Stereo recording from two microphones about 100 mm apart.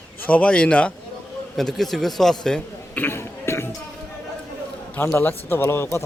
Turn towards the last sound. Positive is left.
turn(degrees=25)  # may be behind; listen again after turning